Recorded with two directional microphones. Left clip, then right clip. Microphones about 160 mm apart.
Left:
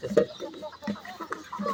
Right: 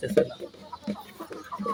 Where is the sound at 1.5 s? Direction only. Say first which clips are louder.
Right 1 dB; 15° left (ahead or behind).